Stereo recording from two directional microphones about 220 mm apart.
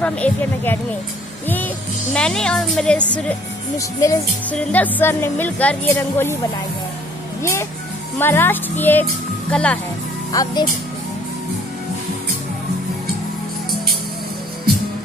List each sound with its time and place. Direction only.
0.0 s speech: 5° left (ahead or behind)
2.1 s a woman's voice: 5° left (ahead or behind)
3.3 s speech: 15° left (ahead or behind)
8.2 s speech: 10° left (ahead or behind)
10.3 s speech: 20° left (ahead or behind)